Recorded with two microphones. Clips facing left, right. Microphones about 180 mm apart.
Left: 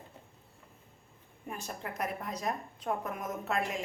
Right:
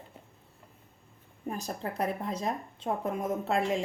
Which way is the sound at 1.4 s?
35° right (ahead or behind).